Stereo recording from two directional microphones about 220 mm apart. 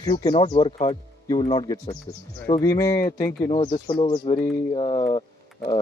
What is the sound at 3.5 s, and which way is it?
Speech, 25° left (ahead or behind).